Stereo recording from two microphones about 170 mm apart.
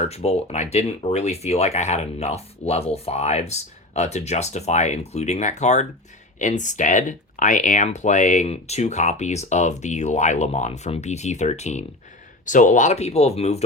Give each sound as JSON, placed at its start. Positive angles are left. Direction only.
{"t": 0.1, "sound": "speech", "side_deg": 40}